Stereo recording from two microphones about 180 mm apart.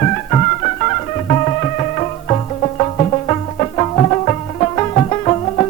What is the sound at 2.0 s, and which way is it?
Music, 30° left (ahead or behind).